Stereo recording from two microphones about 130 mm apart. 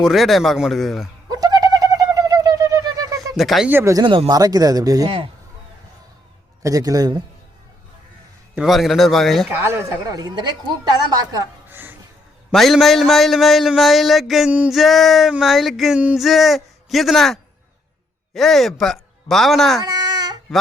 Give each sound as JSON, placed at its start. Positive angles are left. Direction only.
{"t": 0.0, "sound": "a man's voice", "side_deg": 0}
{"t": 1.3, "sound": "bird", "side_deg": -30}
{"t": 3.3, "sound": "a man's voice", "side_deg": 0}
{"t": 3.7, "sound": "speech", "side_deg": -15}
{"t": 3.9, "sound": "a woman's voice", "side_deg": -40}
{"t": 5.0, "sound": "speech", "side_deg": -45}
{"t": 6.6, "sound": "a woman's voice", "side_deg": -25}
{"t": 8.5, "sound": "a man's voice", "side_deg": 0}
{"t": 9.5, "sound": "a woman's voice", "side_deg": -15}
{"t": 11.7, "sound": "music", "side_deg": -15}
{"t": 12.5, "sound": "a man's voice", "side_deg": 0}
{"t": 19.8, "sound": "baby cry", "side_deg": -30}